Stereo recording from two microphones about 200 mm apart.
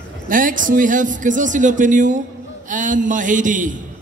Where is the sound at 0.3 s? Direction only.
40° right (ahead or behind).